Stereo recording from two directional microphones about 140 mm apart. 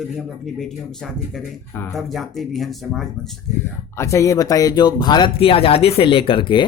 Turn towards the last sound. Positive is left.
turn(degrees=35)  # may be behind; listen again after turning